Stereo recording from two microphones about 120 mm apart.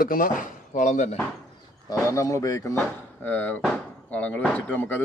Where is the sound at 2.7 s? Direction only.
15° left (ahead or behind).